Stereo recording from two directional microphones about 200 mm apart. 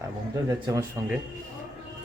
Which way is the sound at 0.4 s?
20° right (ahead or behind).